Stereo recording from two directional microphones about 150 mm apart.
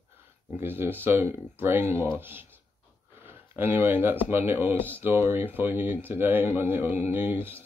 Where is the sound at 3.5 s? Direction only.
15° right (ahead or behind).